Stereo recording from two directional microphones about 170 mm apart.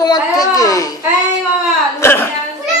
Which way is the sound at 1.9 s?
15° left (ahead or behind).